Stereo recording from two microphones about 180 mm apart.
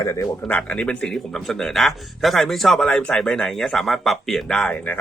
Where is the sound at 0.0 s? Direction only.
20° left (ahead or behind).